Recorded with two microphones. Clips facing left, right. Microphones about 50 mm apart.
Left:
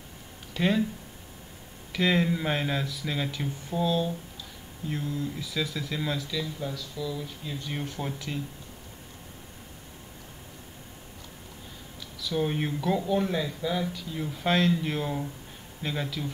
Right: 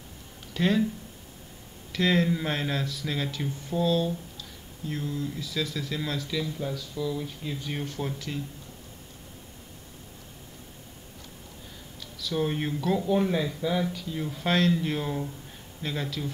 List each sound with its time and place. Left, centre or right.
0.6 s speech: centre
1.9 s speech: centre
6.2 s speech: centre
7.8 s speech: centre
12.0 s speech: centre
13.0 s speech: centre